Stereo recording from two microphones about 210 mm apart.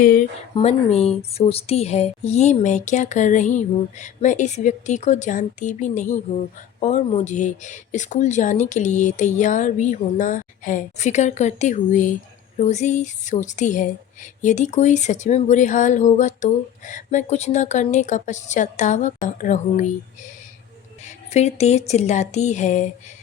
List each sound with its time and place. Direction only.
0.0 s speech: 40° left (ahead or behind)
0.5 s speech: 30° left (ahead or behind)
21.0 s speech: 30° left (ahead or behind)